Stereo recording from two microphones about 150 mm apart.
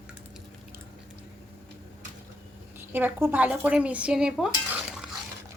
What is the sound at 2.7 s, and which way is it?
A woman's voice, 15° right (ahead or behind).